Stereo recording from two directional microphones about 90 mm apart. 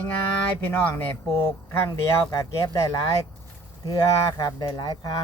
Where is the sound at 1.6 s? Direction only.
35° left (ahead or behind).